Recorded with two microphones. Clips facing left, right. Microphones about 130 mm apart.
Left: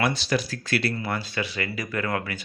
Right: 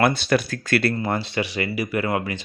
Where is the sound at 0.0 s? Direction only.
55° right (ahead or behind).